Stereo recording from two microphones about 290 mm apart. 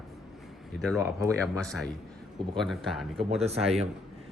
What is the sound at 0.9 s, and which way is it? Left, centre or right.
Speech, centre.